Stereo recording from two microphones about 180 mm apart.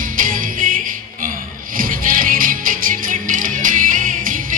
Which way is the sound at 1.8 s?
50° right (ahead or behind).